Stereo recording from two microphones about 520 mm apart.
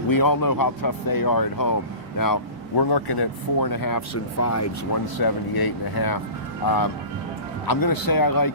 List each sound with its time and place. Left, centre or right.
0.1 s speech: left
5.1 s speech: left